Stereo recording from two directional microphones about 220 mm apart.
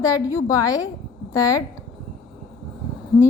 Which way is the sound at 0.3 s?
15° left (ahead or behind).